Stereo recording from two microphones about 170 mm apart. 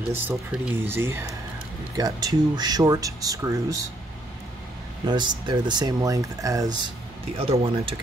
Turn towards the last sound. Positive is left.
turn(degrees=-35)  # may be behind; listen again after turning